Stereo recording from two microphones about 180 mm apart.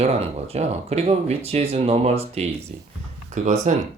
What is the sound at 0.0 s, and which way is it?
Speech, 35° right (ahead or behind).